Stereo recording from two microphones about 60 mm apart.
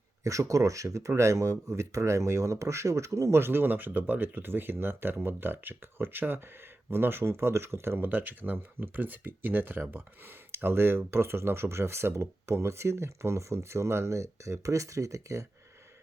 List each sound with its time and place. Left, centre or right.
0.3 s speech: right
8.0 s speech: right